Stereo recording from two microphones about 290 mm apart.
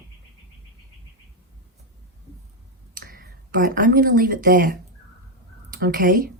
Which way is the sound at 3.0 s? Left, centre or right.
Right.